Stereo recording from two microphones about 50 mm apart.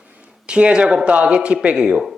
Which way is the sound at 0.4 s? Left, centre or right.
Right.